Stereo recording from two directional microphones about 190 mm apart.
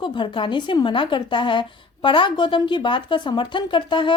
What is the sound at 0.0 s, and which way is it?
A woman's voice, 25° left (ahead or behind).